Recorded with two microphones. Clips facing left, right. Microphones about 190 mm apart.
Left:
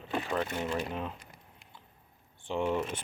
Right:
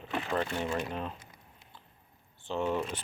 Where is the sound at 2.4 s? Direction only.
15° left (ahead or behind).